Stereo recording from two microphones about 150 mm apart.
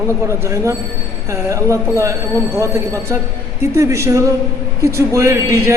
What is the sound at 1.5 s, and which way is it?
A man's voice, 20° right (ahead or behind).